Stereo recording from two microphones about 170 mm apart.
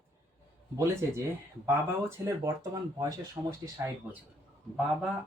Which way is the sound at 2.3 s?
20° right (ahead or behind).